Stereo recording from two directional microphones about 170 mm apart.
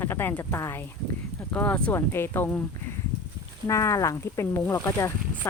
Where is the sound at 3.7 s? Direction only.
15° left (ahead or behind).